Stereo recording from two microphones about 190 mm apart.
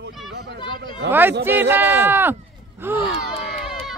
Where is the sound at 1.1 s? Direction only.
10° right (ahead or behind).